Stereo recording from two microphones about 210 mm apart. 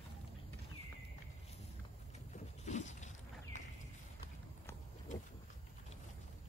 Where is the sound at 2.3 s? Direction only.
35° left (ahead or behind).